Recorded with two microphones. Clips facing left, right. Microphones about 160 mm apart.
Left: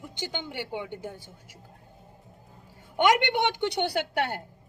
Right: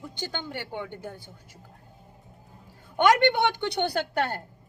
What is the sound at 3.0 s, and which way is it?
A woman's voice, 15° left (ahead or behind).